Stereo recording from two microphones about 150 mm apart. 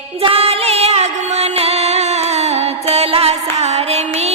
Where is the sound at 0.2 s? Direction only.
40° right (ahead or behind).